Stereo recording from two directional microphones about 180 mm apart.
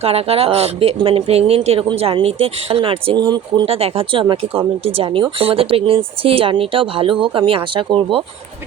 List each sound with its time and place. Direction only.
0.0 s speech: 35° right (ahead or behind)